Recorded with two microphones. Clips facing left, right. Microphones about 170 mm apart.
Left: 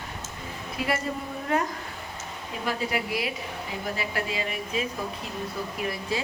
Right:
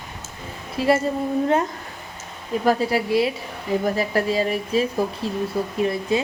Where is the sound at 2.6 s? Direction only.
40° right (ahead or behind).